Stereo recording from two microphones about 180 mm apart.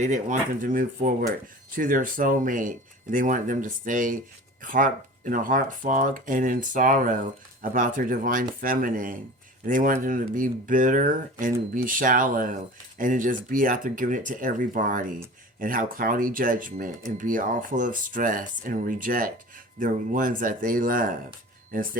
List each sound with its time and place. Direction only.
0.0 s speech: 45° right (ahead or behind)